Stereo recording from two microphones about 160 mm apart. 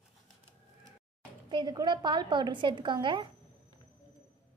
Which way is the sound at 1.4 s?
25° right (ahead or behind).